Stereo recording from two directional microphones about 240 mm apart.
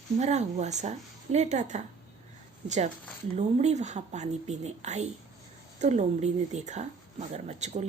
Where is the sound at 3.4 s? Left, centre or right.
Right.